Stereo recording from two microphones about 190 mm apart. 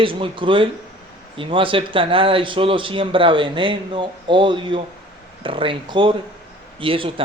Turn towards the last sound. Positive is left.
turn(degrees=-25)  # may be behind; listen again after turning